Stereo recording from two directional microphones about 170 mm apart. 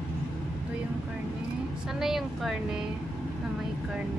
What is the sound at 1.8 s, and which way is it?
Speech, centre (ahead or behind).